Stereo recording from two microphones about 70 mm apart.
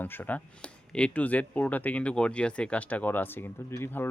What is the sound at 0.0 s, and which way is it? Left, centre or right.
Speech, left.